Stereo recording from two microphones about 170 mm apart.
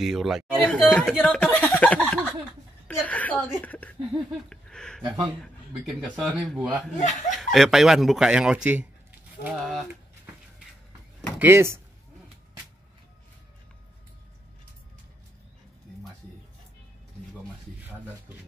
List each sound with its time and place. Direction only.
0.0 s a woman's voice: centre (ahead or behind)
4.1 s a sound: 5° left (ahead or behind)
5.4 s speech: centre (ahead or behind)
7.0 s speech: 45° left (ahead or behind)
7.3 s speech: centre (ahead or behind)
11.3 s speech: 15° right (ahead or behind)